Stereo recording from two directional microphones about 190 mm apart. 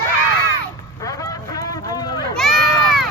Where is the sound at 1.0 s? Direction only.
15° left (ahead or behind).